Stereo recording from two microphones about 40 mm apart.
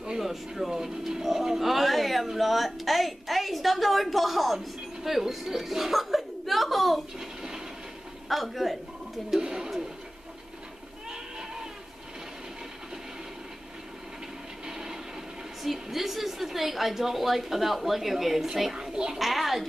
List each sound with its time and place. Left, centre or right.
0.2 s a woman's voice: centre
7.2 s a sound: centre
8.3 s a woman's voice: centre
9.4 s speech: centre
11.1 s goat: centre
14.7 s train: centre
15.6 s a woman's voice: centre